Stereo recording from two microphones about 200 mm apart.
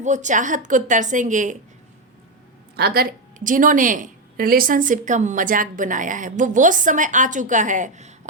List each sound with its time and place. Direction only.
0.0 s a woman's voice: 35° right (ahead or behind)
2.7 s a woman's voice: 50° right (ahead or behind)